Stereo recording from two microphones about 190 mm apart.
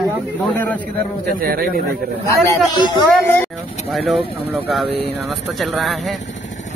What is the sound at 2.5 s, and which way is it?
Speech, 25° left (ahead or behind).